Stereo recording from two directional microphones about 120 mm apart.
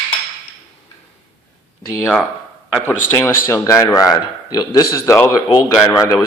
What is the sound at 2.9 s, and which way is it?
A man's voice, 25° left (ahead or behind).